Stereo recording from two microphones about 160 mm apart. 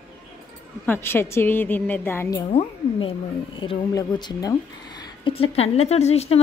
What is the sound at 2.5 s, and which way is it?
Speech, 35° left (ahead or behind).